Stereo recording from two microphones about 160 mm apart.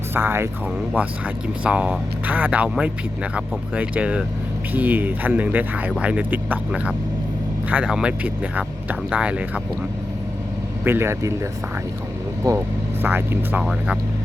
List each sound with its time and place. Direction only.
0.1 s speech: 15° right (ahead or behind)
1.6 s speech: 5° right (ahead or behind)
10.8 s speech: 15° right (ahead or behind)
12.5 s speech: 15° right (ahead or behind)